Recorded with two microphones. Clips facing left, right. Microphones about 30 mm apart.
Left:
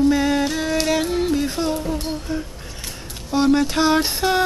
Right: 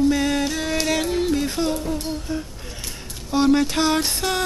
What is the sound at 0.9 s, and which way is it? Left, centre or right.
Music, centre.